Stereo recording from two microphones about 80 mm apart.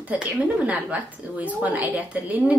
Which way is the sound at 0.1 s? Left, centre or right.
Centre.